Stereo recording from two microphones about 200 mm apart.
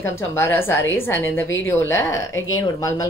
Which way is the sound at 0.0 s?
15° left (ahead or behind).